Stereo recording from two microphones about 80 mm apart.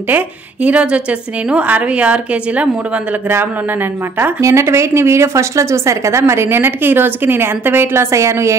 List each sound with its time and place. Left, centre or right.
0.7 s a woman's voice: centre
4.4 s speech: right